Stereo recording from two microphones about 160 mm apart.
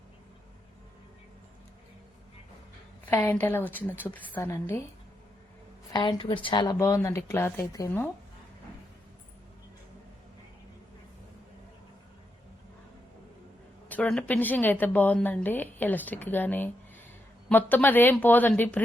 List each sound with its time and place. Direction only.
3.1 s a woman's voice: 15° left (ahead or behind)
5.9 s speech: 30° left (ahead or behind)
13.8 s a woman's voice: 10° left (ahead or behind)